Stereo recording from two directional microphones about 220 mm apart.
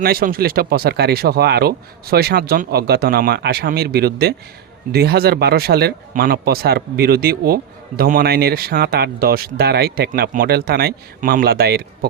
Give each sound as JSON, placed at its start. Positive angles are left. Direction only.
{"t": 0.0, "sound": "speech", "side_deg": -40}